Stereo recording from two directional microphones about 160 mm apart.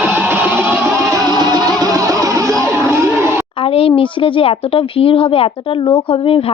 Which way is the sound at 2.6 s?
15° right (ahead or behind).